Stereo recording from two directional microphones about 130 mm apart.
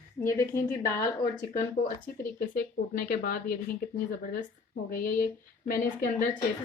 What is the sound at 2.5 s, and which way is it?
Speech, 90° left.